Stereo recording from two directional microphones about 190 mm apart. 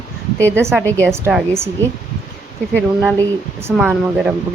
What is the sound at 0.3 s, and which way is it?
Speech, 10° left (ahead or behind).